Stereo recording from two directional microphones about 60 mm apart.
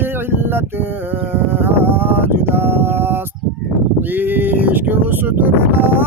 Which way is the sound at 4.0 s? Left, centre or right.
Right.